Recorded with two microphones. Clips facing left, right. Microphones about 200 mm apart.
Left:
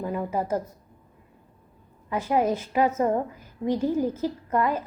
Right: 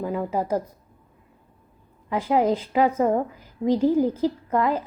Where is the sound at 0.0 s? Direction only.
15° right (ahead or behind).